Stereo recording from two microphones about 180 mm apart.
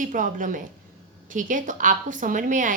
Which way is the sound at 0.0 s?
45° right (ahead or behind).